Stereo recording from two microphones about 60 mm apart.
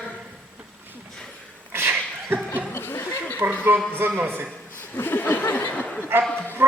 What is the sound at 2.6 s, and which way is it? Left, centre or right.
Laughter, left.